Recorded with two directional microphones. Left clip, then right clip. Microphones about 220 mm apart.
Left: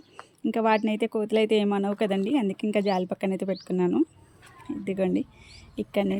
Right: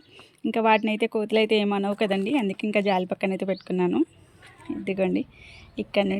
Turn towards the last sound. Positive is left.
turn(degrees=5)  # may be behind; listen again after turning